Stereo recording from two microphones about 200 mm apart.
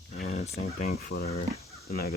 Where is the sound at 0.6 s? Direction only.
50° left (ahead or behind).